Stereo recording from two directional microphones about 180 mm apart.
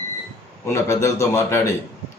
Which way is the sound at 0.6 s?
15° left (ahead or behind).